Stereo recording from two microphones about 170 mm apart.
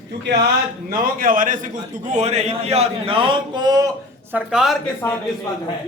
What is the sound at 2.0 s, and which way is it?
A man's voice, 40° right (ahead or behind).